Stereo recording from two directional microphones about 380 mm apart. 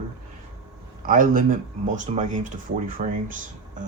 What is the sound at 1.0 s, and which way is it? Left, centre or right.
Speech, right.